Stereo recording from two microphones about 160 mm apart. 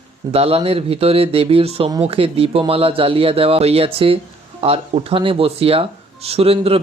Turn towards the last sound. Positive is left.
turn(degrees=-35)  # may be behind; listen again after turning